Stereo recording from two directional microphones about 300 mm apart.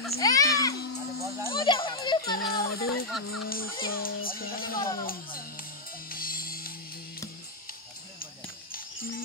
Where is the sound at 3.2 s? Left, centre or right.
Left.